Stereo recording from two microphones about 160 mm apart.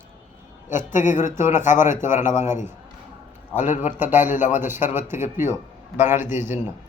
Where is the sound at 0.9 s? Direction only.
50° left (ahead or behind).